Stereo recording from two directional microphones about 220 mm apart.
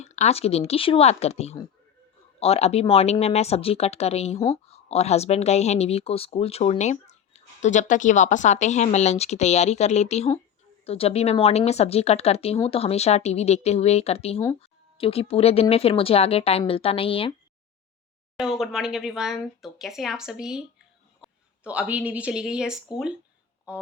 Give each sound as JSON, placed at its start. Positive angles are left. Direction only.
{"t": 0.0, "sound": "a woman's voice", "side_deg": 30}
{"t": 18.3, "sound": "a woman's voice", "side_deg": 0}